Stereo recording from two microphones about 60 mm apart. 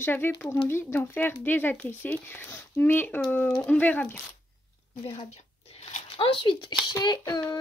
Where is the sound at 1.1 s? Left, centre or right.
Left.